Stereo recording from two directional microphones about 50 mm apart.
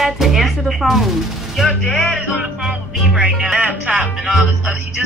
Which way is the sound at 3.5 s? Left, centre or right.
Right.